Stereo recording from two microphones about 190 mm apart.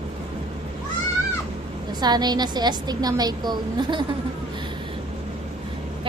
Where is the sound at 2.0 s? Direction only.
20° right (ahead or behind).